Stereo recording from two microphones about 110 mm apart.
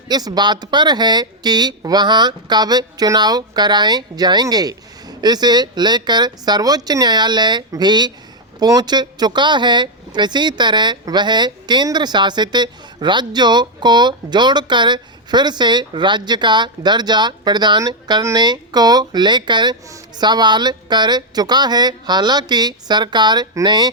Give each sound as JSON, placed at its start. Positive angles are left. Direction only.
{"t": 0.1, "sound": "speech", "side_deg": -40}